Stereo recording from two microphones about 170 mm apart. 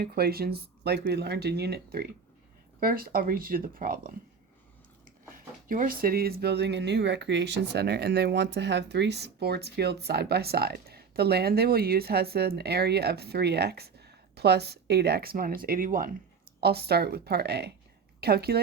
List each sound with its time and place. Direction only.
0.0 s speech: 65° right (ahead or behind)
5.6 s speech: 55° right (ahead or behind)
16.6 s a woman's voice: 70° right (ahead or behind)